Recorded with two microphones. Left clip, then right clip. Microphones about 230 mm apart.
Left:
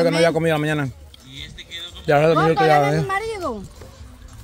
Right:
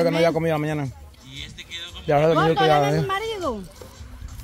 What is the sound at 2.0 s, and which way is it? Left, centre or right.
Speech, centre.